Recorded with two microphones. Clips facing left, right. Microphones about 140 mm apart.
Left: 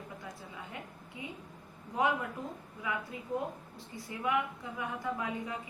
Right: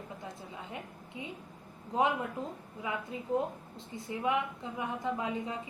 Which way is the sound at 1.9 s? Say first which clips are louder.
Right 2 dB; 25° right (ahead or behind).